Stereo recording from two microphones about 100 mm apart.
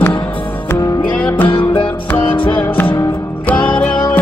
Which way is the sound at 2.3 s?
20° left (ahead or behind).